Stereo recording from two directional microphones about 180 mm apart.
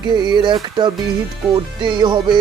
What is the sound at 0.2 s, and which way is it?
Speech, 25° right (ahead or behind).